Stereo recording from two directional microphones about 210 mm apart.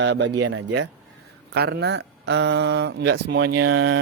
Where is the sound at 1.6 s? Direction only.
50° right (ahead or behind).